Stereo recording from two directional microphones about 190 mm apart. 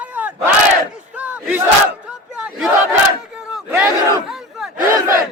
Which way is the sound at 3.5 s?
10° right (ahead or behind).